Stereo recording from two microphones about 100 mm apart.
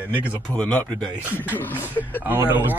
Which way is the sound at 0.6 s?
10° left (ahead or behind).